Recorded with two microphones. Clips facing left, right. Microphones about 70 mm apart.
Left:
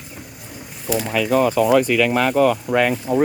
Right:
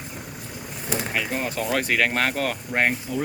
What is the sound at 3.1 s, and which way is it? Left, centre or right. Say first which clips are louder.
Speech: left 10 dB; left.